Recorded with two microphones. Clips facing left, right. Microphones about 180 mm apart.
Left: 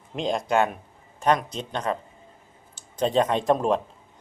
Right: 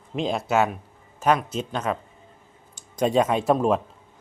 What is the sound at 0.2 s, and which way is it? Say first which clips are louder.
Speech: right 1 dB; 5° right (ahead or behind).